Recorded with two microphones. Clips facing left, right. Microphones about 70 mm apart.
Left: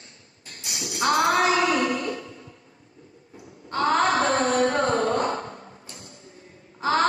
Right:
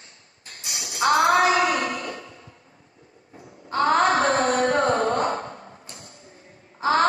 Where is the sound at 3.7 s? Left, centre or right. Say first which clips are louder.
Right 2 dB; right.